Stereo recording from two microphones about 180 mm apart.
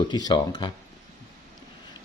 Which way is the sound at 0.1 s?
25° left (ahead or behind).